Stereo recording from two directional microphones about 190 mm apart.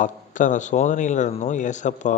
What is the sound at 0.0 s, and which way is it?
A man's voice, 40° left (ahead or behind).